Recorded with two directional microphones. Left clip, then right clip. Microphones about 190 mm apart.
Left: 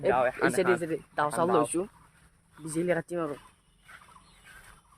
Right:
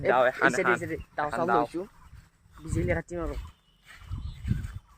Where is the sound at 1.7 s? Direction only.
35° left (ahead or behind).